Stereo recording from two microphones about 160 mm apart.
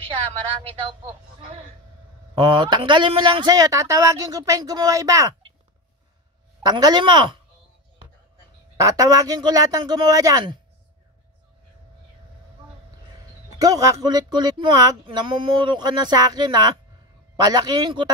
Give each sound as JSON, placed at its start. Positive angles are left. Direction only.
{"t": 2.3, "sound": "speech", "side_deg": -30}
{"t": 6.6, "sound": "speech", "side_deg": -25}
{"t": 8.7, "sound": "speech", "side_deg": -20}
{"t": 13.6, "sound": "speech", "side_deg": -20}